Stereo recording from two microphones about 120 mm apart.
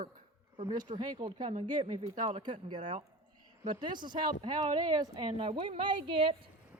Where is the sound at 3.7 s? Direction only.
40° right (ahead or behind).